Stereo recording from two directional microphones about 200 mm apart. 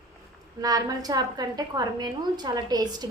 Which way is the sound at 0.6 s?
20° right (ahead or behind).